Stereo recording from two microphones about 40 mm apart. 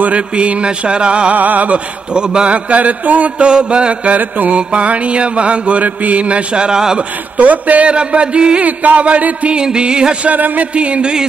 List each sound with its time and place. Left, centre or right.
0.0 s mantra: right
1.3 s mantra: right
2.1 s mantra: right
3.4 s mantra: right
4.1 s mantra: right
7.3 s mantra: right
7.9 s mantra: right
8.6 s a sound: right
9.0 s mantra: right
9.6 s mantra: right
10.3 s a sound: right
10.8 s mantra: right